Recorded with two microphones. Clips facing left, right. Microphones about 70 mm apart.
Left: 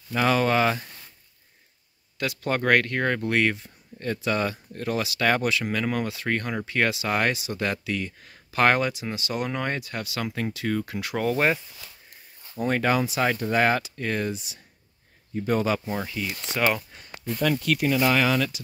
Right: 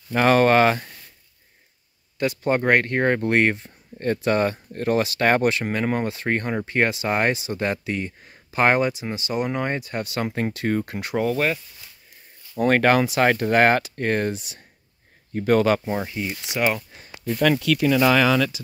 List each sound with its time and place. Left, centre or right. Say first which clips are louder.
0.1 s speech: right 5 dB; right
2.1 s speech: right 5 dB; right
9.8 s speech: right 4 dB; right
11.3 s speech: even; centre
12.5 s speech: right 6 dB; right
16.2 s speech: right 2 dB; right
16.5 s speech: right 1 dB; centre
17.4 s speech: right 4 dB; right